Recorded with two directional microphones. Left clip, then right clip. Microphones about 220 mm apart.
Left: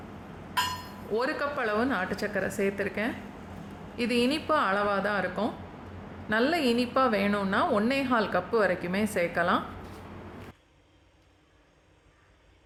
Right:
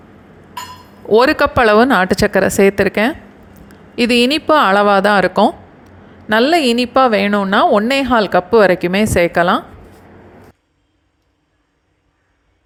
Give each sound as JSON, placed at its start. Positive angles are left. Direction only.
{"t": 1.1, "sound": "a woman's voice", "side_deg": -35}